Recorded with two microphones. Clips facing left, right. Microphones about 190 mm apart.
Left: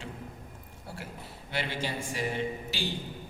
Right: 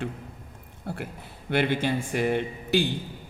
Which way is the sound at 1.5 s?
55° right (ahead or behind).